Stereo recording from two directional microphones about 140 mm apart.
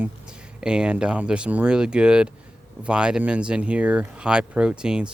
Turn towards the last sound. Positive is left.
turn(degrees=-5)  # may be behind; listen again after turning